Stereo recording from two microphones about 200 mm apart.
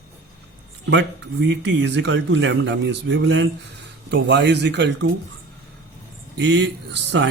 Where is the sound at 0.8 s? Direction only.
65° right (ahead or behind).